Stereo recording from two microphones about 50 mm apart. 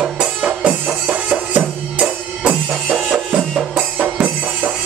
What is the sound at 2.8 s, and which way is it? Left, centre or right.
Music, centre.